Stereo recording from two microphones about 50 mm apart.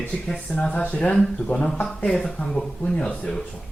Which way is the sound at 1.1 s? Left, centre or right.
Centre.